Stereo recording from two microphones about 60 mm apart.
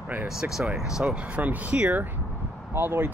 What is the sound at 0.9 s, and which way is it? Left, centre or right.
Speech, centre.